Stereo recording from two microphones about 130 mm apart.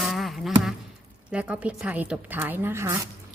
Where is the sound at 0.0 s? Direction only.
Centre (ahead or behind).